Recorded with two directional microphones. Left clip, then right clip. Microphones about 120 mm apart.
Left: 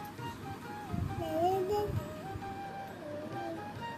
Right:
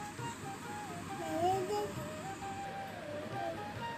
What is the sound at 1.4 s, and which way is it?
Music, 25° left (ahead or behind).